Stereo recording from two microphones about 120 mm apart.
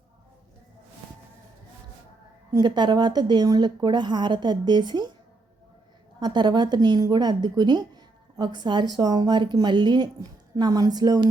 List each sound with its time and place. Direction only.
2.5 s speech: 35° right (ahead or behind)
6.1 s speech: 35° right (ahead or behind)